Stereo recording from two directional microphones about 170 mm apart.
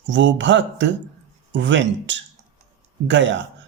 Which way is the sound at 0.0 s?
90° right.